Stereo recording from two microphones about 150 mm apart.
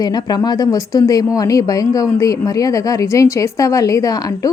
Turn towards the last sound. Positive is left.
turn(degrees=25)  # may be behind; listen again after turning